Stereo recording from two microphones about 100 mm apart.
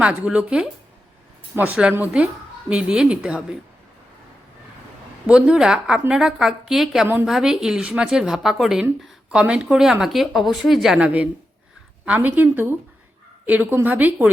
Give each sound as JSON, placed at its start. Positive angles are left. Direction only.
{"t": 0.0, "sound": "a woman's voice", "side_deg": -10}
{"t": 5.2, "sound": "a woman's voice", "side_deg": -10}